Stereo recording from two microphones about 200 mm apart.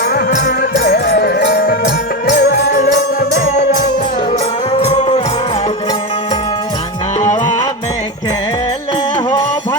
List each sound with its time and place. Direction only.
0.1 s music: 55° left (ahead or behind)
4.8 s music: 30° left (ahead or behind)